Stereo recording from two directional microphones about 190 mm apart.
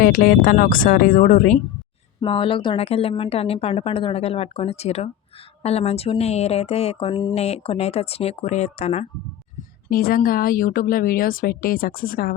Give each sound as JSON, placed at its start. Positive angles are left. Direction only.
{"t": 0.0, "sound": "speech", "side_deg": 50}
{"t": 2.2, "sound": "a woman's voice", "side_deg": 25}
{"t": 7.3, "sound": "a woman's voice", "side_deg": 35}
{"t": 9.9, "sound": "speech", "side_deg": 50}